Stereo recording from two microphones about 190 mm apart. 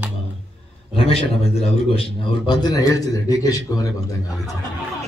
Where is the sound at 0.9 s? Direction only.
30° left (ahead or behind).